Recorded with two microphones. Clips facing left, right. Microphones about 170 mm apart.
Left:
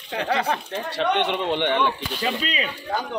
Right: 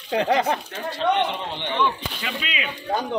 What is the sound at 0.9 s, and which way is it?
Speech, 70° left (ahead or behind).